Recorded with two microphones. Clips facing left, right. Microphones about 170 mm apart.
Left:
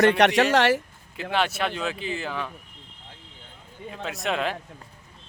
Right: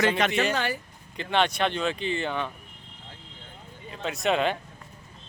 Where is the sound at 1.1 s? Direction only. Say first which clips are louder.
Right 1 dB; 5° left (ahead or behind).